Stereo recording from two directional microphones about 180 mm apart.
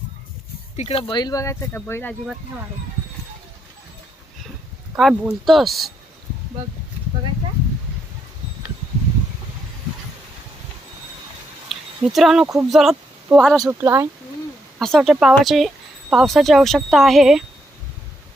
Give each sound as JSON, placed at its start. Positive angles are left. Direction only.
{"t": 0.8, "sound": "speech", "side_deg": 35}
{"t": 4.9, "sound": "speech", "side_deg": 0}
{"t": 11.7, "sound": "speech", "side_deg": 0}
{"t": 13.6, "sound": "speech", "side_deg": -15}
{"t": 14.8, "sound": "speech", "side_deg": 0}